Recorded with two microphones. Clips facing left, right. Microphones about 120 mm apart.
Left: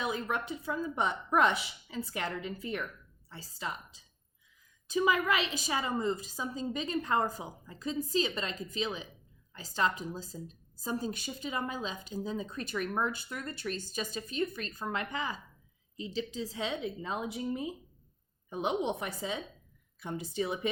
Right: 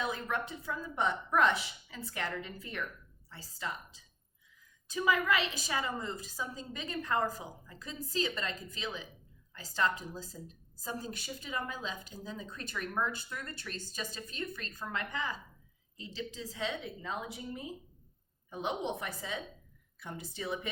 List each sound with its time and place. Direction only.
0.0 s a woman's voice: 15° left (ahead or behind)
4.9 s a woman's voice: 20° left (ahead or behind)